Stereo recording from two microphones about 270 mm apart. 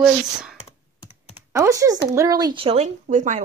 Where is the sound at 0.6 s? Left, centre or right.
Left.